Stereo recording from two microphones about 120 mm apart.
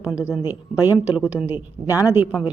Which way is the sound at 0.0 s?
10° right (ahead or behind).